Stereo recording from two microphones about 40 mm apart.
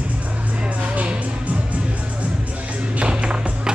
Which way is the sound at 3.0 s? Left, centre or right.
Right.